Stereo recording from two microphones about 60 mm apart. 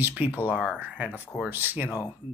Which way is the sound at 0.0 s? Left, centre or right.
Right.